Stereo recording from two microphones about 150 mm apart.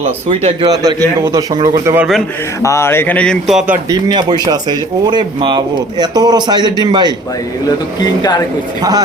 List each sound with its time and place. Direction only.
0.0 s a man's voice: 40° right (ahead or behind)
0.6 s speech: 25° right (ahead or behind)
2.6 s speech: 20° left (ahead or behind); by 3.6 s centre (ahead or behind)
3.8 s speech: 25° right (ahead or behind)